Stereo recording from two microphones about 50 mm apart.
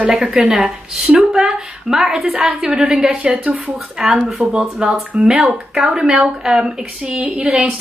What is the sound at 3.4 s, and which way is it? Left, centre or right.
Speech, right.